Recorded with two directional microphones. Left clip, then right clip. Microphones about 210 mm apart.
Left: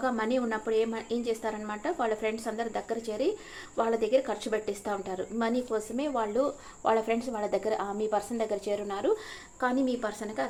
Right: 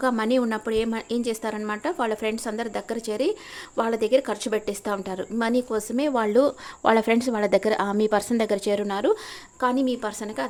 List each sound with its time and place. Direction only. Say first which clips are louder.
0.0 s a woman's voice: right 6 dB; 50° right (ahead or behind)
9.6 s a woman's voice: right 5 dB; 40° right (ahead or behind)